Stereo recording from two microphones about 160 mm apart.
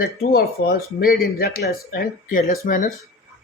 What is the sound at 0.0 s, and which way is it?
Speech, 70° left (ahead or behind).